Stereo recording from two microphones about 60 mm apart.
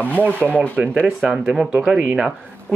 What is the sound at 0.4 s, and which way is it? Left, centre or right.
Speech, right.